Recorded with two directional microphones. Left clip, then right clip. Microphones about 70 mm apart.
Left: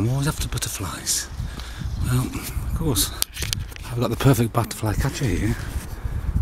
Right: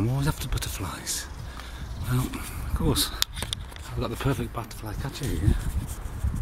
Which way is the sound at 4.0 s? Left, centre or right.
Left.